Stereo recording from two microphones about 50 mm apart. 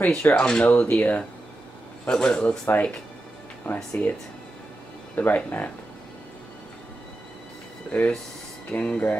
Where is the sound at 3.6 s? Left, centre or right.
Left.